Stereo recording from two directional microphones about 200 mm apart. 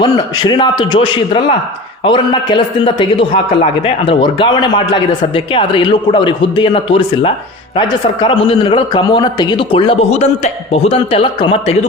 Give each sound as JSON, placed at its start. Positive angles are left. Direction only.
{"t": 0.0, "sound": "a man's voice", "side_deg": 20}